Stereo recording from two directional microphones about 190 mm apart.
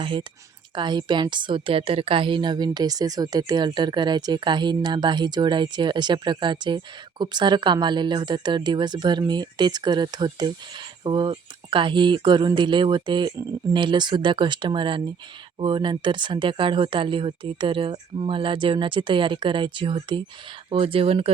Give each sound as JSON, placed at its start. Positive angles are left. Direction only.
{"t": 0.0, "sound": "a woman's voice", "side_deg": -25}